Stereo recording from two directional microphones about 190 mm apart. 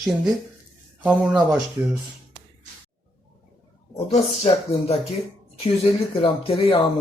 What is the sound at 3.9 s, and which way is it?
Speech, 30° left (ahead or behind).